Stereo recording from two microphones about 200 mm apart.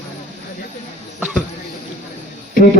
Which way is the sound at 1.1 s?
5° right (ahead or behind).